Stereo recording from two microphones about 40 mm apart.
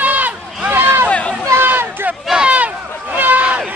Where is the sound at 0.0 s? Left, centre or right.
Right.